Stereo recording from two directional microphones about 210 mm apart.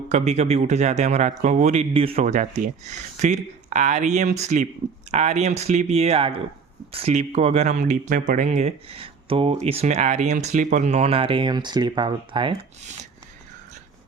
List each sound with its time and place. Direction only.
0.1 s speech: 30° right (ahead or behind)